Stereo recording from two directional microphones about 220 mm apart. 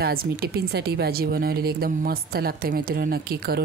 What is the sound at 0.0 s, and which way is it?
Speech, 45° right (ahead or behind).